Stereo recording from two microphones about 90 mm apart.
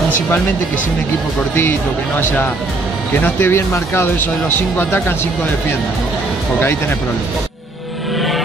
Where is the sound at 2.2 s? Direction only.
20° left (ahead or behind).